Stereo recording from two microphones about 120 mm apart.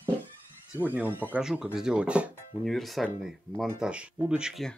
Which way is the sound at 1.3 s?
5° right (ahead or behind).